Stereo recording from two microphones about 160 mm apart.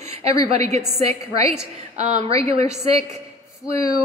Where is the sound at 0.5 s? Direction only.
40° right (ahead or behind).